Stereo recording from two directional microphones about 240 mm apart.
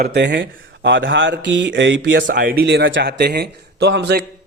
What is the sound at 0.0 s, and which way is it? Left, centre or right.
Speech, right.